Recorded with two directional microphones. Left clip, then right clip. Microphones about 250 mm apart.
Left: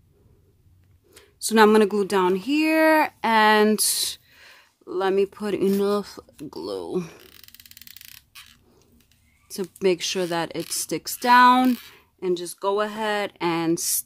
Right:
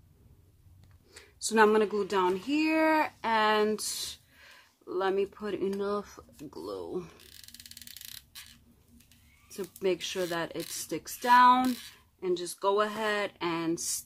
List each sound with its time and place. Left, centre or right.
1.1 s speech: left
7.2 s a sound: centre
9.5 s speech: left